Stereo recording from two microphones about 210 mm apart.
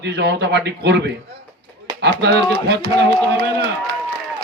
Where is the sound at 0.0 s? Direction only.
55° right (ahead or behind).